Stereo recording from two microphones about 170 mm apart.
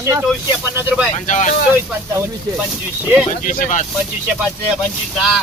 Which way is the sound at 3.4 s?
50° left (ahead or behind).